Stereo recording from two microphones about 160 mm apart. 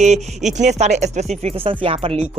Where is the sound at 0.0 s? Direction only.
50° right (ahead or behind).